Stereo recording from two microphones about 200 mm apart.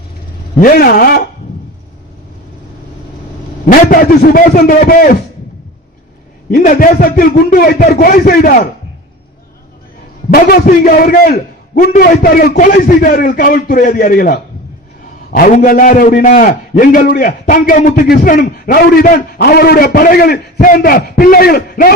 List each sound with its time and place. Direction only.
0.6 s a man's voice: 45° left (ahead or behind)
3.7 s a man's voice: 45° left (ahead or behind)
6.5 s a man's voice: 45° left (ahead or behind)
10.3 s a man's voice: 50° left (ahead or behind)